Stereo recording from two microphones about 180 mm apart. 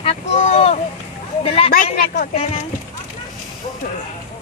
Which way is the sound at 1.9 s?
45° left (ahead or behind).